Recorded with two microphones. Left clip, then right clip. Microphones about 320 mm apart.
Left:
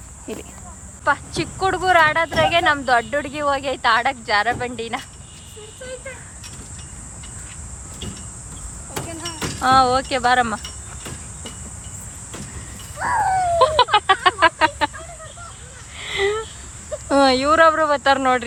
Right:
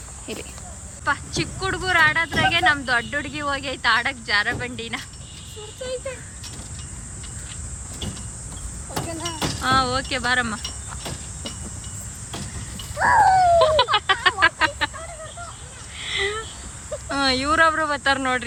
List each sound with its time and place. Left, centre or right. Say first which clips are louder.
0.3 s speech: left 1 dB; centre
9.6 s speech: left 6 dB; centre
13.0 s a sound: right 4 dB; right
13.6 s music: left 2 dB; centre
16.0 s a sound: left 4 dB; centre
17.1 s speech: left 6 dB; centre